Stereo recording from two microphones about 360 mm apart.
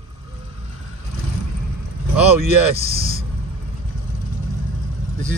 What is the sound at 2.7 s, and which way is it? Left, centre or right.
Speech, right.